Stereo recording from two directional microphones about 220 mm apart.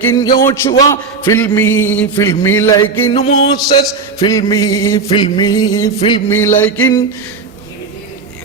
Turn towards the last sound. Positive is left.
turn(degrees=10)  # may be behind; listen again after turning